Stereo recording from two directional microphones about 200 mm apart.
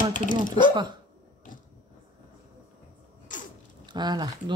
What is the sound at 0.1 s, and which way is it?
Speech, 40° left (ahead or behind).